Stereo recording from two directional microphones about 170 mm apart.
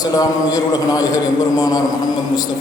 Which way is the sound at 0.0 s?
20° left (ahead or behind).